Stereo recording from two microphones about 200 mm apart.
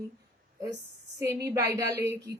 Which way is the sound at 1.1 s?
15° right (ahead or behind).